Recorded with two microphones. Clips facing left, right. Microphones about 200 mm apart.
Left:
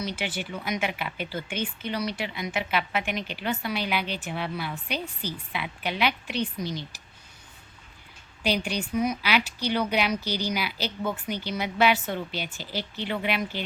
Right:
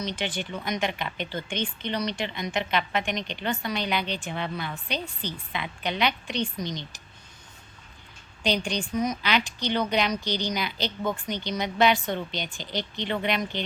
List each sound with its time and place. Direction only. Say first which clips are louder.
0.0 s speech: right 1 dB; 10° left (ahead or behind)
8.4 s speech: even; 5° left (ahead or behind)